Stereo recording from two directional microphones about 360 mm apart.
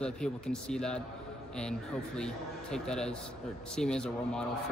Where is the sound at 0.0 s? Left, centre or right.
Centre.